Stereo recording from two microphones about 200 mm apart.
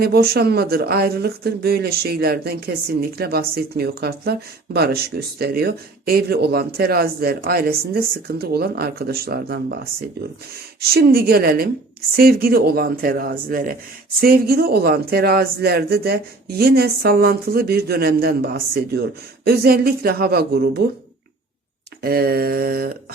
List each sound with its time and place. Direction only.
0.0 s speech: 50° right (ahead or behind)
10.8 s speech: 50° right (ahead or behind)
22.0 s speech: 50° right (ahead or behind)